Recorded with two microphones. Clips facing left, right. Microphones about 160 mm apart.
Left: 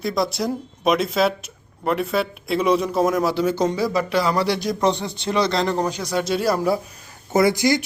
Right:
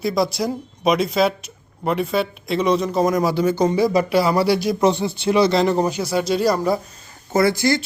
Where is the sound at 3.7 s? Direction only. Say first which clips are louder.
Right 4 dB; 15° right (ahead or behind); by 6.8 s 5° left (ahead or behind).